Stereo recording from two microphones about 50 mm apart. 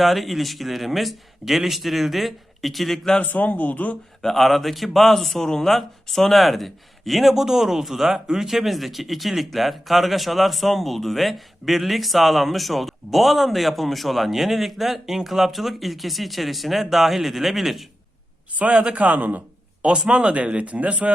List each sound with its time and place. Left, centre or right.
0.0 s a man's voice: centre
3.2 s speech: left
4.2 s a man's voice: centre
18.5 s a man's voice: right
19.8 s speech: right